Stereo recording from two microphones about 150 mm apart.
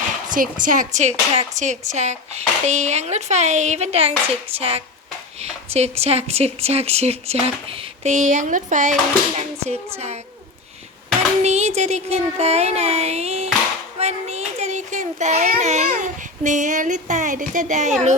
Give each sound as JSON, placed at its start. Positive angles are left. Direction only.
{"t": 0.3, "sound": "speech", "side_deg": -65}
{"t": 8.1, "sound": "speech", "side_deg": -55}
{"t": 11.4, "sound": "a child's voice", "side_deg": -45}